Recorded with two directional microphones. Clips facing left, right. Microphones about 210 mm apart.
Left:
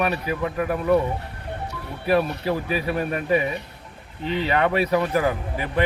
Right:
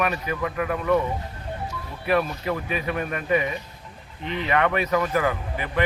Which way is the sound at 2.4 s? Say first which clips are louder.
Left 3 dB; 35° left (ahead or behind).